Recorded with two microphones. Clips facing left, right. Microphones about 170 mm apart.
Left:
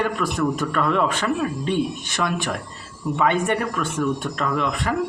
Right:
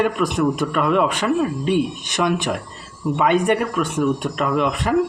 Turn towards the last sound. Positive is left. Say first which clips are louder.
# right 3 dB
turn(degrees=-20)  # may be behind; listen again after turning